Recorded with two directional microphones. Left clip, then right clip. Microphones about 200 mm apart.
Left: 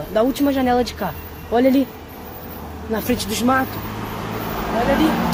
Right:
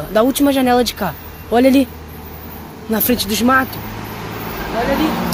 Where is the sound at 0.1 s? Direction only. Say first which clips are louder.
Right 4 dB; 40° right (ahead or behind).